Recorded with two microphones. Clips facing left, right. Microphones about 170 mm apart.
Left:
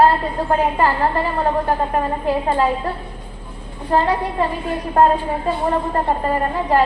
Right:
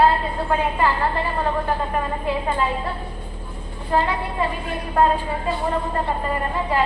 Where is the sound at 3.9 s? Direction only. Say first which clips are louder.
Left 3 dB; 40° left (ahead or behind).